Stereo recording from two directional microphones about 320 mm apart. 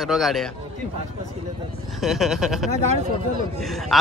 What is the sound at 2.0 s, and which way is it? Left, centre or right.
Speech, centre.